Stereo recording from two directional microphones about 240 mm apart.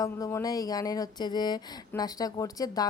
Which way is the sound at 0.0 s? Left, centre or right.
Centre.